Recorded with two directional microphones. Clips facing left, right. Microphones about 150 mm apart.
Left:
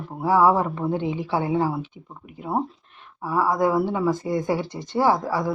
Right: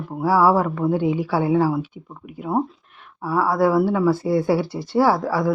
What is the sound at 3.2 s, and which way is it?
Speech, 15° left (ahead or behind).